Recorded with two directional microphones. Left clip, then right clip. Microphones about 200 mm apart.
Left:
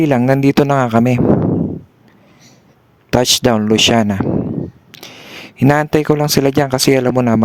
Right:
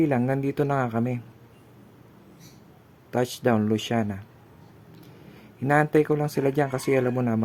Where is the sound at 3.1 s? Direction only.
45° left (ahead or behind).